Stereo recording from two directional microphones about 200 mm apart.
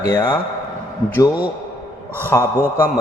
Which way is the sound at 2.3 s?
10° left (ahead or behind).